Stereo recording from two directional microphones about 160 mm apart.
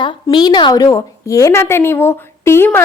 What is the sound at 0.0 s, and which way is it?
A woman's voice, 30° left (ahead or behind).